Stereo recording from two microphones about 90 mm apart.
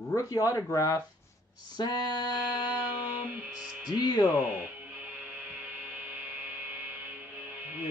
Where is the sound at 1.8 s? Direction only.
50° left (ahead or behind).